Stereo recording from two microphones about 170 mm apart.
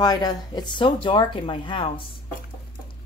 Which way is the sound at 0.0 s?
20° left (ahead or behind).